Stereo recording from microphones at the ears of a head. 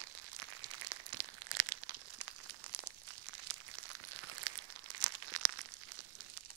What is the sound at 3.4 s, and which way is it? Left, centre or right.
Crumpling, right.